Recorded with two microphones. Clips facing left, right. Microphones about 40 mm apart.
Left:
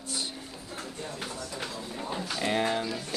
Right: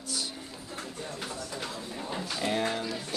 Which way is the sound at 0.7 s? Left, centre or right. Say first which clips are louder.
Left 1 dB; centre.